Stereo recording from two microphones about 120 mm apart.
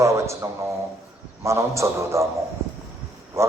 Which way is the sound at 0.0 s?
25° right (ahead or behind).